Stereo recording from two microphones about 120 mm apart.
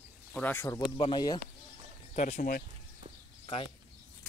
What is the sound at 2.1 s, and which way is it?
Speech, 70° left (ahead or behind).